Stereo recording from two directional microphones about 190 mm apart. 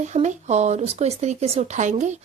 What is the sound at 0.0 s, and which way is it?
Speech, 40° right (ahead or behind).